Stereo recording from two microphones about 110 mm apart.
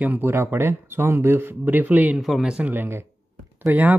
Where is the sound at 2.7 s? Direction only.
20° right (ahead or behind).